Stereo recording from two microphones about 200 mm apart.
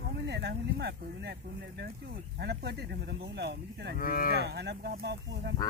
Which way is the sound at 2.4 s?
55° right (ahead or behind).